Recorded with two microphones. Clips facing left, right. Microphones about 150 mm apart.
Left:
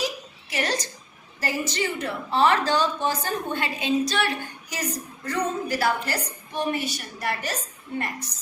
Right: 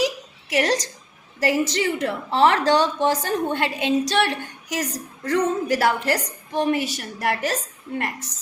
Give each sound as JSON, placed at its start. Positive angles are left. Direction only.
{"t": 0.5, "sound": "a woman's voice", "side_deg": -85}